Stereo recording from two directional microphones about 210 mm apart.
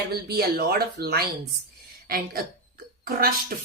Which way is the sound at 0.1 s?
50° right (ahead or behind).